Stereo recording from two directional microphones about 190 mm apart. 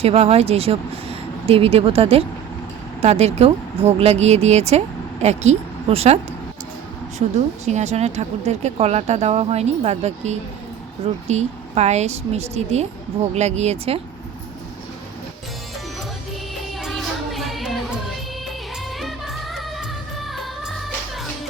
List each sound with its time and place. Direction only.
0.0 s speech: 30° right (ahead or behind)
7.2 s speech: 40° right (ahead or behind)
16.8 s music: centre (ahead or behind)